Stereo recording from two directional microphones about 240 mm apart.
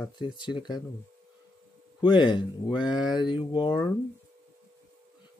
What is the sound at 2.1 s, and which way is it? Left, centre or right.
Speech, centre.